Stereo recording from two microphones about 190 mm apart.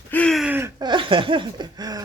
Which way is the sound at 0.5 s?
15° right (ahead or behind).